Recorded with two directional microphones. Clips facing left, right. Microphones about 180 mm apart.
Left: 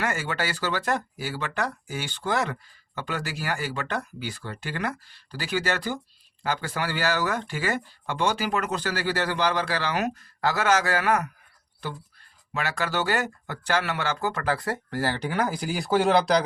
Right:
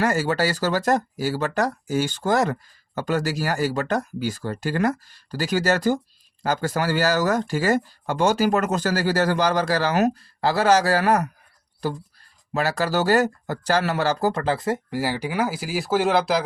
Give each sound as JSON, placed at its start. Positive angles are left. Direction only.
{"t": 0.0, "sound": "speech", "side_deg": -40}
{"t": 14.9, "sound": "speech", "side_deg": -10}